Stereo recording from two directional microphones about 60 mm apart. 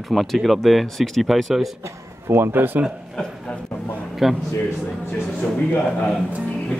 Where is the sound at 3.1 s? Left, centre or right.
Centre.